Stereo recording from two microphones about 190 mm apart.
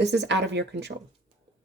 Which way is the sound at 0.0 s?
65° right (ahead or behind).